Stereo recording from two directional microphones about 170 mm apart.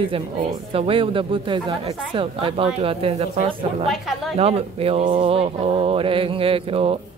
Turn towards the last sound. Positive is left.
turn(degrees=-35)  # may be behind; listen again after turning